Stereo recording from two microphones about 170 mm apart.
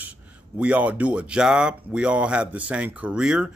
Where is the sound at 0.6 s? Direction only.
10° right (ahead or behind).